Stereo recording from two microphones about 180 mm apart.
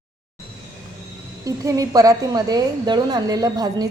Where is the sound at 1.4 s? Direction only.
20° right (ahead or behind).